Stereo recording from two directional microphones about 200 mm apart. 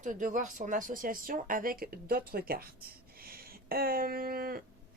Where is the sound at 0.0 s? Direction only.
40° right (ahead or behind).